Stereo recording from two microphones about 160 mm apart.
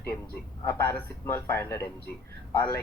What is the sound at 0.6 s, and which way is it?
Speech, 15° left (ahead or behind).